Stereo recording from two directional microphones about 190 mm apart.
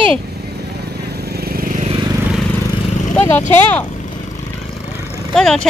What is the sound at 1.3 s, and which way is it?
Vehicle, 50° right (ahead or behind).